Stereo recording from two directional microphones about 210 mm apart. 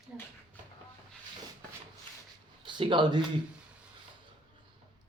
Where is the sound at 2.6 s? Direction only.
20° right (ahead or behind).